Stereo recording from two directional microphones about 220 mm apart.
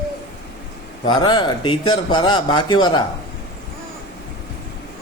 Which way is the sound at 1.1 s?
20° left (ahead or behind).